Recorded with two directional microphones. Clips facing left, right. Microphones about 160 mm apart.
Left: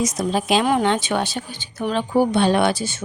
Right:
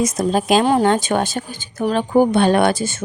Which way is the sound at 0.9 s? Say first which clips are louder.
Right 4 dB; 45° right (ahead or behind).